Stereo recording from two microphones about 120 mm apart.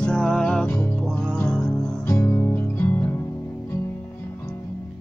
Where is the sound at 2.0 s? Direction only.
20° left (ahead or behind).